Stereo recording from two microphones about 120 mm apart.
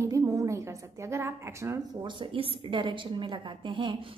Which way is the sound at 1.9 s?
40° right (ahead or behind).